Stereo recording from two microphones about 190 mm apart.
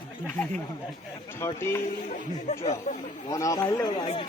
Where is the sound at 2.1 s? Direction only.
40° left (ahead or behind).